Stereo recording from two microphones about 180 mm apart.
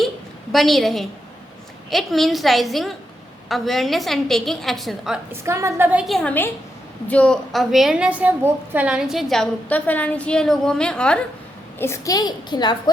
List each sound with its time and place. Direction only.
0.5 s a woman's voice: centre (ahead or behind)
5.3 s a woman's voice: 15° right (ahead or behind); by 11.2 s 5° left (ahead or behind)
11.8 s a woman's voice: 15° left (ahead or behind)